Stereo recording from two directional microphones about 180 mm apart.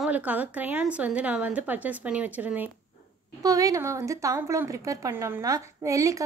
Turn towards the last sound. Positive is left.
turn(degrees=-20)  # may be behind; listen again after turning